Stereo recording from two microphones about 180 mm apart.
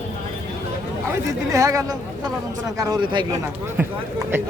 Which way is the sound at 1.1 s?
20° right (ahead or behind).